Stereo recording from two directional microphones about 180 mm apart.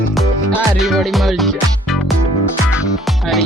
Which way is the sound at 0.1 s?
Centre (ahead or behind).